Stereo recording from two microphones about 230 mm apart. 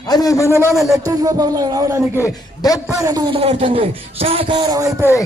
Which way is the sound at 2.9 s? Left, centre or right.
Centre.